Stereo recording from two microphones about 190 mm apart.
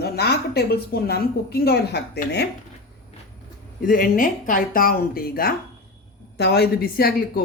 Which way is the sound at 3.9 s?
45° left (ahead or behind).